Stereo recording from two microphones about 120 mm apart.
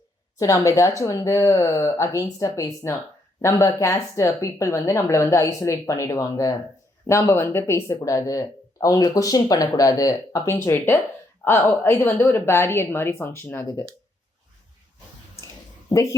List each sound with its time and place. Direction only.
0.3 s speech: 30° left (ahead or behind)
15.9 s speech: 25° left (ahead or behind)